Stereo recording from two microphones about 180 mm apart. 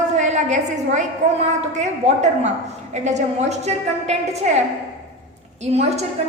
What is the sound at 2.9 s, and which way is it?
A woman's voice, 40° right (ahead or behind).